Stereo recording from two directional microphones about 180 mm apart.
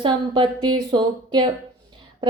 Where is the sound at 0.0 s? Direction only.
25° right (ahead or behind).